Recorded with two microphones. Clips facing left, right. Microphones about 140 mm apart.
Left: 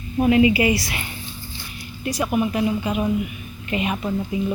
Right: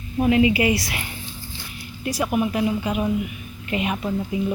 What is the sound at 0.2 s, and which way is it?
Speech, 10° left (ahead or behind).